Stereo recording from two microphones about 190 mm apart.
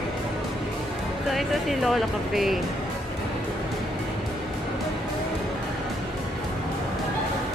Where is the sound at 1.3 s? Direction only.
Centre (ahead or behind).